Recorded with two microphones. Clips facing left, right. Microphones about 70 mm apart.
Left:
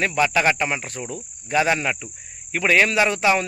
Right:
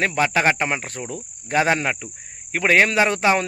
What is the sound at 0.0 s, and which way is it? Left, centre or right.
Speech, right.